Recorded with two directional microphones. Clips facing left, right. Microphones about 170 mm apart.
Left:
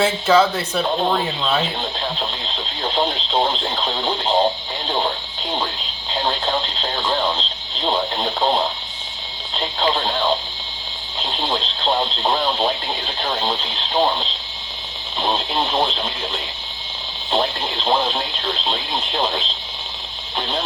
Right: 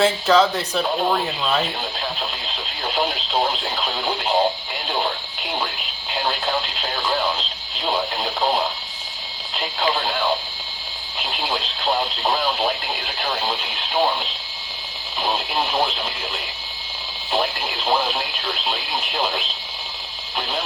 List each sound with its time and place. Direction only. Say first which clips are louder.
0.0 s speech: left 1 dB; centre (ahead or behind)
2.8 s radio: left 2 dB; 30° left (ahead or behind)
3.3 s speech: left 2 dB; 25° left (ahead or behind)
4.9 s music: left 2 dB; 25° left (ahead or behind)
6.1 s radio: left 2 dB; 20° left (ahead or behind)
8.4 s speech: left 2 dB; 25° left (ahead or behind)
15.6 s speech: left 2 dB; 25° left (ahead or behind)
17.7 s radio: left 2 dB; 25° left (ahead or behind)
18.4 s speech: left 2 dB; 20° left (ahead or behind)